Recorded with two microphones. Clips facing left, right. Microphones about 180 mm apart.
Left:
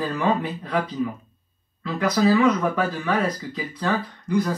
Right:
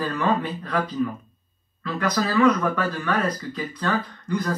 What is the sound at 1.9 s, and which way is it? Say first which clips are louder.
Speech: left 5 dB; 10° left (ahead or behind).